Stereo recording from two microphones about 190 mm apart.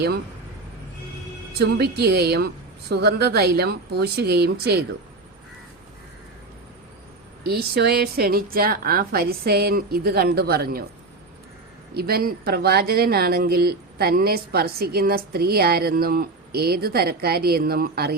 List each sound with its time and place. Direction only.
1.5 s a woman's voice: 60° right (ahead or behind)
7.4 s speech: 55° right (ahead or behind)
11.9 s speech: 55° right (ahead or behind)